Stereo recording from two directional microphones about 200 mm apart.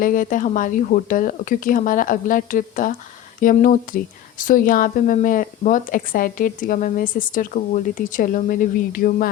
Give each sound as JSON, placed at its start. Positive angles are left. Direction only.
{"t": 0.0, "sound": "speech", "side_deg": 45}